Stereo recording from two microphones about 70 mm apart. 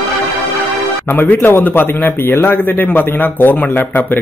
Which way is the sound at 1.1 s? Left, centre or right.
Left.